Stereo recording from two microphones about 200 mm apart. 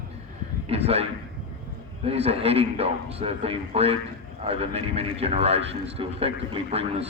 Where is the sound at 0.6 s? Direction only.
30° right (ahead or behind).